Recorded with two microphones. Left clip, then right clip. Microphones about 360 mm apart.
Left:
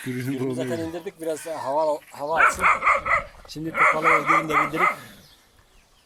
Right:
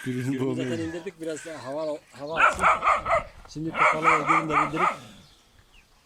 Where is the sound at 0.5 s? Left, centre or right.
Centre.